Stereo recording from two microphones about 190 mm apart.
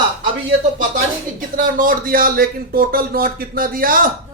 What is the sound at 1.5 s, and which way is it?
Speech, 45° right (ahead or behind).